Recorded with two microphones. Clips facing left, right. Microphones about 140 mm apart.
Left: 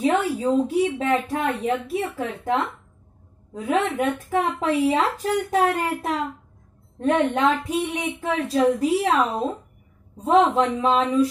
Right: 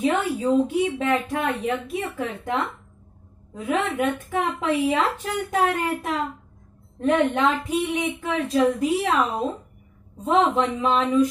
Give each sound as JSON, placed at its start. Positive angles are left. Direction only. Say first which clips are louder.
{"t": 0.0, "sound": "speech", "louder": "left 1 dB", "side_deg": 30}
{"t": 10.4, "sound": "speech", "louder": "left 2 dB", "side_deg": 35}